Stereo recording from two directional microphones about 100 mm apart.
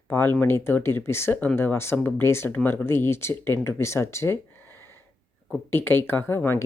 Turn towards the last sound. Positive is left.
turn(degrees=25)  # may be behind; listen again after turning